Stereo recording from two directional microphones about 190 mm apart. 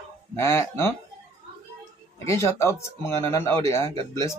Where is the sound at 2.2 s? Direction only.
15° left (ahead or behind).